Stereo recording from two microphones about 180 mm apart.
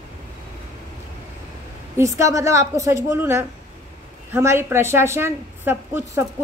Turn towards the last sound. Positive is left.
turn(degrees=-10)  # may be behind; listen again after turning